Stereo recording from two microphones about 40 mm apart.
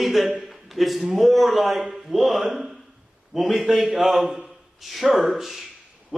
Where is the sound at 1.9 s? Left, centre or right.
Centre.